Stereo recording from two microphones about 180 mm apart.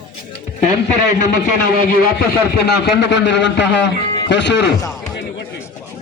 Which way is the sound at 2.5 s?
65° left (ahead or behind).